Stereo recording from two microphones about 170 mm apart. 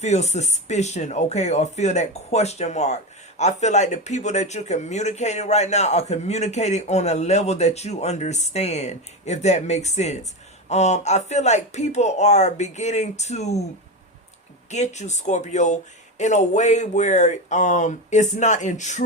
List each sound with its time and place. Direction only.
0.0 s speech: 40° left (ahead or behind)
14.7 s speech: 45° left (ahead or behind)